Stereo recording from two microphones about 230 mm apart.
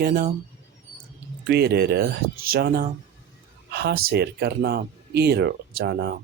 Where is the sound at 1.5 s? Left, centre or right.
Right.